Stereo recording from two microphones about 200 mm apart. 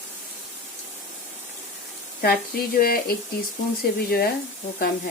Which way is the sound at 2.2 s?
50° left (ahead or behind).